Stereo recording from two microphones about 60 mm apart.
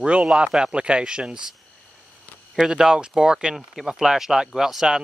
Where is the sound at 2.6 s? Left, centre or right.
Centre.